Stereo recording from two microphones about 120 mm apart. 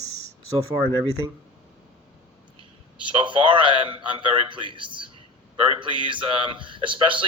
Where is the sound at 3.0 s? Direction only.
45° right (ahead or behind).